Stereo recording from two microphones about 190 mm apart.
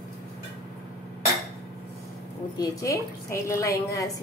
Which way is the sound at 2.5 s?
20° left (ahead or behind).